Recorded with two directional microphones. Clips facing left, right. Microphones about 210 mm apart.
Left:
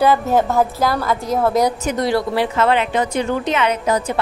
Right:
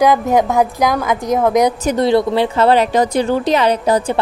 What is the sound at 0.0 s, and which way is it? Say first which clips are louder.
A woman's voice: right 2 dB; 15° right (ahead or behind).